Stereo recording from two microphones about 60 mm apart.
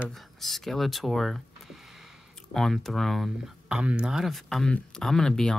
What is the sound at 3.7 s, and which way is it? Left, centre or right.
Speech, centre.